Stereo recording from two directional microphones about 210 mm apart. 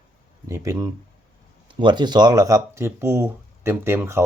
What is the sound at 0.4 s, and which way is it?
Speech, 15° right (ahead or behind).